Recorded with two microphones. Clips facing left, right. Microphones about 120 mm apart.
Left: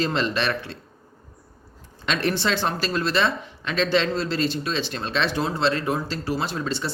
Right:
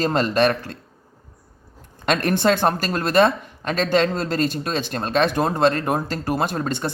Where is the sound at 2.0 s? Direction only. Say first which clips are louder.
Right 5 dB; 50° right (ahead or behind).